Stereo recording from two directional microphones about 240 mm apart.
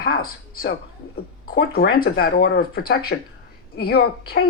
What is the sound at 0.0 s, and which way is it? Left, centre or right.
Speech, left.